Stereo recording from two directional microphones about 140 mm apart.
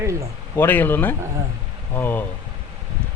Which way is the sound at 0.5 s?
15° left (ahead or behind).